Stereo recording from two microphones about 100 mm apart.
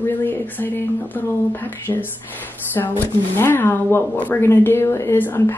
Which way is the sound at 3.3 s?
20° left (ahead or behind).